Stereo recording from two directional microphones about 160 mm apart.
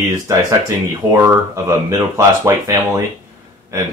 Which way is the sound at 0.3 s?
20° right (ahead or behind).